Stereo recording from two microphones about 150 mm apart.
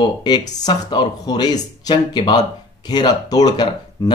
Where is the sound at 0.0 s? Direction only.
30° left (ahead or behind).